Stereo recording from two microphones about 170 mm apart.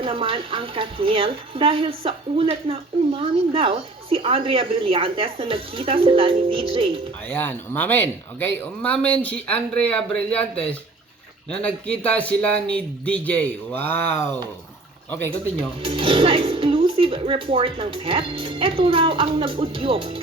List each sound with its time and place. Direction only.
0.0 s speech: 30° right (ahead or behind)
7.3 s speech: 10° left (ahead or behind)
15.8 s speech: 30° right (ahead or behind)